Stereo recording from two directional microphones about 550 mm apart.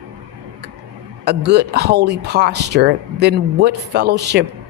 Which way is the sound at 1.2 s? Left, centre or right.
Centre.